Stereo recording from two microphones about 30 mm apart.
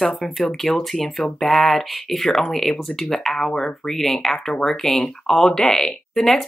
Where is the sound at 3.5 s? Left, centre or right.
Left.